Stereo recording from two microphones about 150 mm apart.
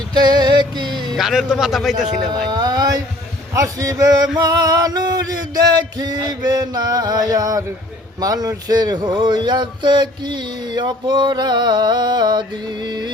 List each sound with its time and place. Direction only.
0.1 s music: 30° right (ahead or behind)
1.1 s speech: centre (ahead or behind)
2.5 s speech: 25° right (ahead or behind)